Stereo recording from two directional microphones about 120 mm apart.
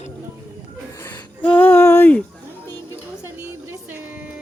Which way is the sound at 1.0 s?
15° left (ahead or behind).